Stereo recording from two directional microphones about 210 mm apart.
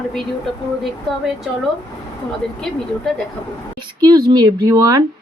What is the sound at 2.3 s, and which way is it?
Speech, centre (ahead or behind).